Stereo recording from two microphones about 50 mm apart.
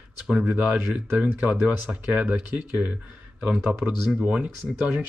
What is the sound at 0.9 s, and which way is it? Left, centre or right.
Speech, right.